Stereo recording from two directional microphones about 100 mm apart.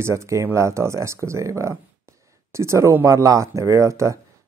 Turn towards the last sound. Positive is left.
turn(degrees=-30)  # may be behind; listen again after turning